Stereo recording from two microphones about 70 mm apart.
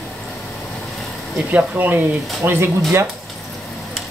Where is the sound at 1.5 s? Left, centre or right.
Right.